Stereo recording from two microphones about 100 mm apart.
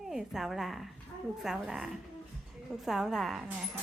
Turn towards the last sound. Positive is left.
turn(degrees=0)  # may be behind; listen again after turning